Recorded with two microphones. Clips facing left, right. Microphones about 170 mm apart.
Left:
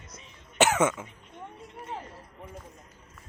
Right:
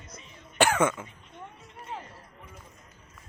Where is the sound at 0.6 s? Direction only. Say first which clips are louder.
Even; 20° left (ahead or behind).